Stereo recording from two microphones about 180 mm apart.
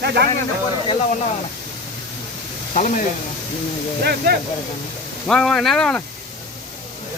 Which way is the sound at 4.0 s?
60° right (ahead or behind).